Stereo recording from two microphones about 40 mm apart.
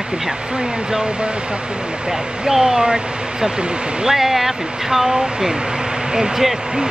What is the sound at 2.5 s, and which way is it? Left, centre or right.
Speech, centre.